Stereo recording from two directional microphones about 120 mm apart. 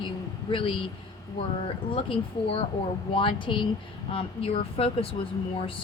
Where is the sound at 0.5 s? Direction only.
45° left (ahead or behind).